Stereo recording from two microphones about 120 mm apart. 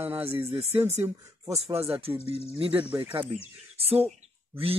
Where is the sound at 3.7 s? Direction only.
55° right (ahead or behind).